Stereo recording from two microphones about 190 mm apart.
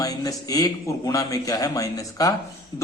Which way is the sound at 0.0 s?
20° left (ahead or behind).